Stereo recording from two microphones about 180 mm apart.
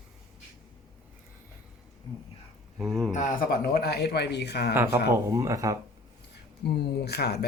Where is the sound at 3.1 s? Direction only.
50° left (ahead or behind); by 4.7 s 65° left (ahead or behind).